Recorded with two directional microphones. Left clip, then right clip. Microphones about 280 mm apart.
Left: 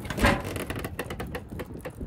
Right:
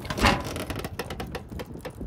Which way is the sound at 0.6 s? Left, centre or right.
Right.